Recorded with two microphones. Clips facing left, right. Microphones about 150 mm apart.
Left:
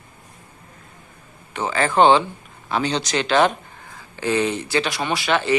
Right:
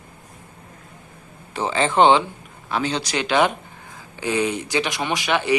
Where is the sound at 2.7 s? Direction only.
5° right (ahead or behind).